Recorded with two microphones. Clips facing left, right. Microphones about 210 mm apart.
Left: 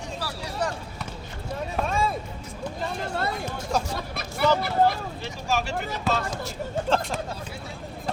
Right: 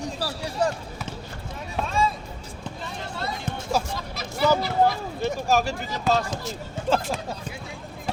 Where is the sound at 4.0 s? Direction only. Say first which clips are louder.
Right 1 dB; 60° left (ahead or behind).